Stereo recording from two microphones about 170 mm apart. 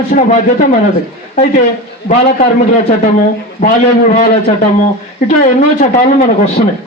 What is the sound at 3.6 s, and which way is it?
Speech, 65° left (ahead or behind).